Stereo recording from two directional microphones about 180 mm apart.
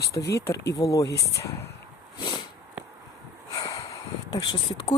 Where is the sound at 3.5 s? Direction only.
20° left (ahead or behind).